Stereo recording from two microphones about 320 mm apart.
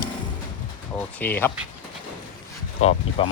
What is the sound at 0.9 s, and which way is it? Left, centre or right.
Speech, centre.